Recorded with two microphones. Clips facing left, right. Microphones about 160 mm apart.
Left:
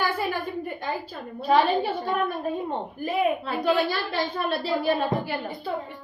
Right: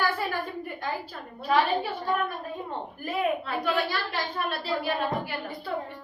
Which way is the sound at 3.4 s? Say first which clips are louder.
Left 4 dB; 30° left (ahead or behind).